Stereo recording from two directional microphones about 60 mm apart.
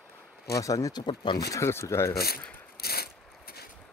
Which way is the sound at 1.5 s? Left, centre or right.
Left.